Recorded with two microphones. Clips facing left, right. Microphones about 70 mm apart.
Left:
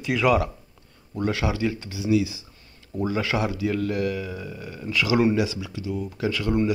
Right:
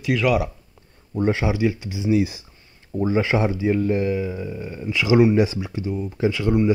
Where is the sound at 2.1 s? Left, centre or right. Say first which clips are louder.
Right 2 dB; right.